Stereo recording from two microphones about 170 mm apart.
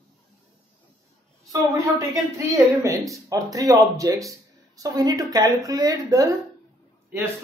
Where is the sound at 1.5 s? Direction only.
20° right (ahead or behind).